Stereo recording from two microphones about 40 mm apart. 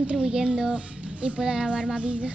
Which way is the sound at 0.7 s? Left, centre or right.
Right.